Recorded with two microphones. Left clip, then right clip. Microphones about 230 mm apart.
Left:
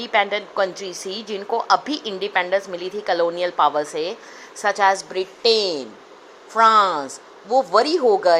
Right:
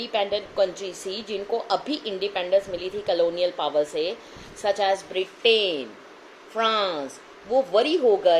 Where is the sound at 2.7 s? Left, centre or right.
Left.